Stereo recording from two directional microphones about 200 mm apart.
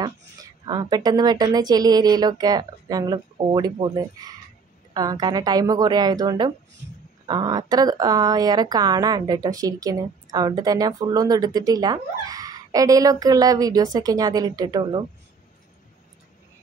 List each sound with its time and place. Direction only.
0.0 s a woman's voice: 20° right (ahead or behind)